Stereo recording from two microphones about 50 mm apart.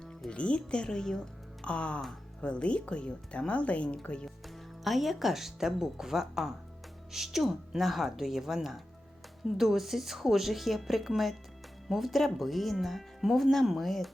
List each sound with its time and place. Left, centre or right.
0.0 s a woman's voice: centre
4.4 s speech: centre